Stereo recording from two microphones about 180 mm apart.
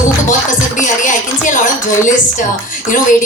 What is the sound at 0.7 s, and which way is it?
A man's voice, 45° left (ahead or behind).